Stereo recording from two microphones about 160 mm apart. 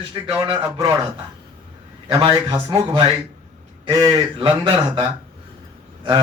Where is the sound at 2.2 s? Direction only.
25° right (ahead or behind).